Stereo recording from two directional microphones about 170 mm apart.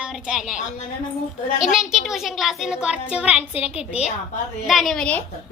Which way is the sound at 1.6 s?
Centre (ahead or behind).